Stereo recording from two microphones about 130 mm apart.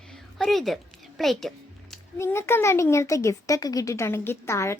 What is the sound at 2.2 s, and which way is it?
A woman's voice, 20° left (ahead or behind).